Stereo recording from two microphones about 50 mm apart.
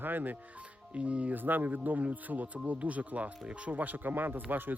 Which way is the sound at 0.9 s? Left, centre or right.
Right.